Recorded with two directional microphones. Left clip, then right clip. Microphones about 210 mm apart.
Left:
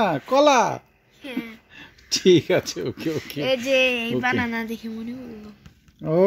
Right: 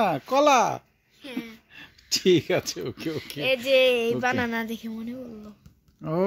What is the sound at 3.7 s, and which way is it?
Speech, 50° right (ahead or behind).